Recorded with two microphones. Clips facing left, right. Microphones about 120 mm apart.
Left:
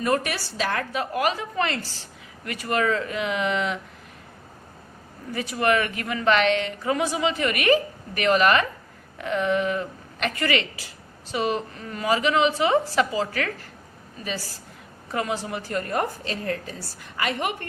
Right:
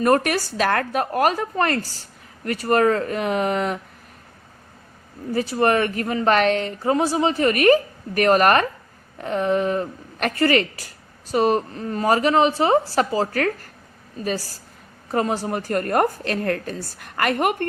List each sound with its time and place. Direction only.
0.0 s a woman's voice: 50° right (ahead or behind)
5.3 s a woman's voice: 35° right (ahead or behind); by 17.7 s 50° right (ahead or behind)